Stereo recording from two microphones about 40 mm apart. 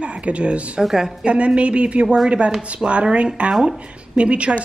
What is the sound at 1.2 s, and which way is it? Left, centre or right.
Speech, right.